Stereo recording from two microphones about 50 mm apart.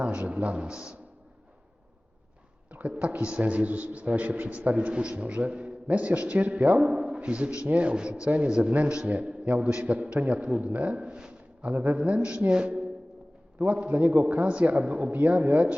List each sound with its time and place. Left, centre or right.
0.0 s a man's voice: right
3.0 s a man's voice: right
10.9 s a sound: centre
11.7 s a man's voice: right